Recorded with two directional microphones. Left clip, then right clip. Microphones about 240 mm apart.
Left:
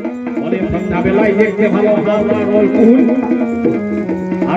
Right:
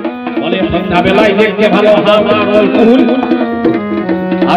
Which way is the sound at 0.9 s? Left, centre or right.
Right.